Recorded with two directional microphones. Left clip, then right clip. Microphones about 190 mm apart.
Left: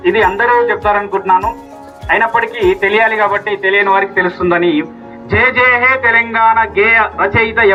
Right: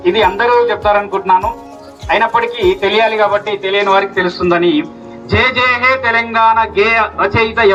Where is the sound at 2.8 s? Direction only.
30° right (ahead or behind).